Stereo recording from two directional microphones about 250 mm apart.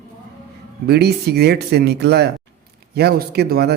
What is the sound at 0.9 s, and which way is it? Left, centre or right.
A man's voice, right.